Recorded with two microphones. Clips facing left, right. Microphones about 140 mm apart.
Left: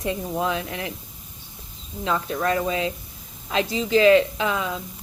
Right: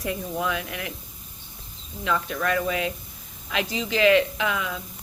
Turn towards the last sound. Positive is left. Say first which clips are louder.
# left 2 dB
turn(degrees=30)  # may be behind; listen again after turning